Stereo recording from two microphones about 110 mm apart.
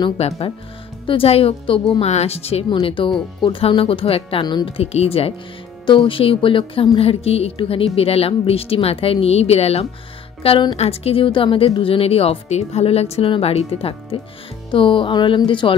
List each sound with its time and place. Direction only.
0.2 s speech: 65° left (ahead or behind)
2.7 s speech: 50° left (ahead or behind)
4.7 s speech: 70° left (ahead or behind)
5.9 s speech: 50° left (ahead or behind)